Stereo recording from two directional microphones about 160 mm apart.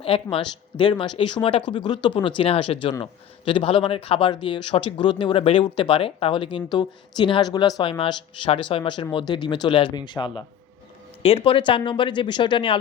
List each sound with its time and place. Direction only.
0.0 s a man's voice: 35° left (ahead or behind)